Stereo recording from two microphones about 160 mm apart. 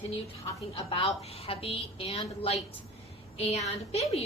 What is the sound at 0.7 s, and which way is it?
A woman's voice, 35° left (ahead or behind).